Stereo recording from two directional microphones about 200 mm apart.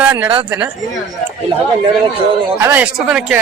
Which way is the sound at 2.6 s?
10° right (ahead or behind).